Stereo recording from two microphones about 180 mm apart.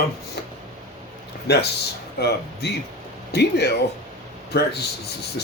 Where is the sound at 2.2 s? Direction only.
65° left (ahead or behind).